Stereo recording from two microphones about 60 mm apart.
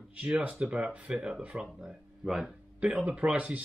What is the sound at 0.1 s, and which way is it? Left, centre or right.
Speech, centre.